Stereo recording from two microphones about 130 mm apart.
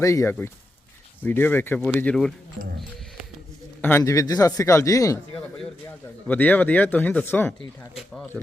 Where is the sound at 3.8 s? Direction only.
15° left (ahead or behind).